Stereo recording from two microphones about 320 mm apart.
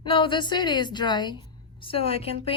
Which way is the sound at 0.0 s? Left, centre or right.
Centre.